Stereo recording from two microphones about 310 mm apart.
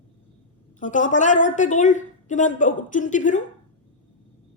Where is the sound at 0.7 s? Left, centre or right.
Left.